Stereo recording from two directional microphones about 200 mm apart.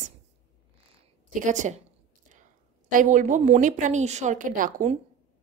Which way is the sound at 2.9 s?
40° right (ahead or behind).